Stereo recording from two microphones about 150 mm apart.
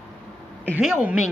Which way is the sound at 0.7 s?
5° right (ahead or behind).